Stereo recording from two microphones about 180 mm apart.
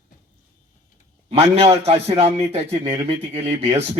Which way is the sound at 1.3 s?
35° right (ahead or behind).